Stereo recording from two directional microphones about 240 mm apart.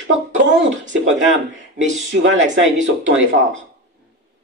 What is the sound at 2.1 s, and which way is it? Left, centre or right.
Speech, right.